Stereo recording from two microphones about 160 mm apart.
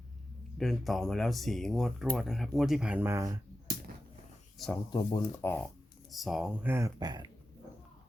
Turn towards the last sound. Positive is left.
turn(degrees=-25)  # may be behind; listen again after turning